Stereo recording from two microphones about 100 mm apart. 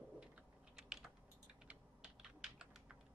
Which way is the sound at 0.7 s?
5° right (ahead or behind).